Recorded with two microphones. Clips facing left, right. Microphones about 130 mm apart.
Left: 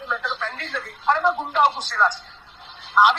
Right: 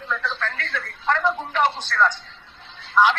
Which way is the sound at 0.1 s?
15° left (ahead or behind).